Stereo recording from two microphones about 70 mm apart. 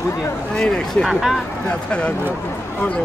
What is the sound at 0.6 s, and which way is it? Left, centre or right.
Speech, centre.